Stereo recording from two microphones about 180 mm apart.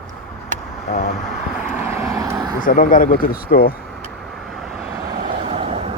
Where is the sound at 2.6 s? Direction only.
50° left (ahead or behind).